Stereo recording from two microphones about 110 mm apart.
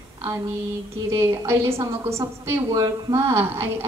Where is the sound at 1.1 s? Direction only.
25° right (ahead or behind).